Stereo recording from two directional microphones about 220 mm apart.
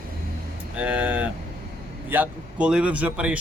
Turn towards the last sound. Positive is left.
turn(degrees=-5)  # may be behind; listen again after turning